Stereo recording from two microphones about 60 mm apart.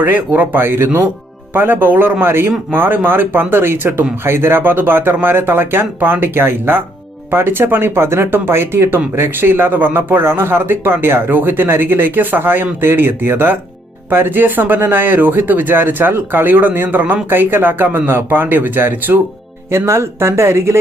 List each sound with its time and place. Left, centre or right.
0.0 s speech: right
19.7 s speech: right